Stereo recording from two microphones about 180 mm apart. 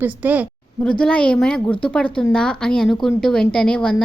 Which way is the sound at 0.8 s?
5° left (ahead or behind).